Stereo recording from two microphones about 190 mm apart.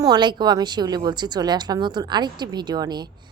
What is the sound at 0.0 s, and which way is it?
A woman's voice, 20° right (ahead or behind).